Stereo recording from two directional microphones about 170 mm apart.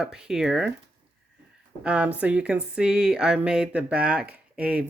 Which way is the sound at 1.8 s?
5° right (ahead or behind).